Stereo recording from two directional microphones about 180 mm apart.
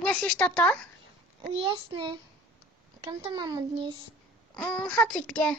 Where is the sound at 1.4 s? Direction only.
30° right (ahead or behind).